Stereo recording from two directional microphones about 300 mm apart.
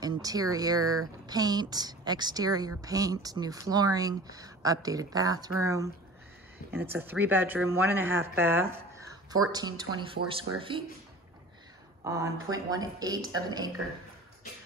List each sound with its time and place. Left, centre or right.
0.0 s speech: centre
12.0 s speech: centre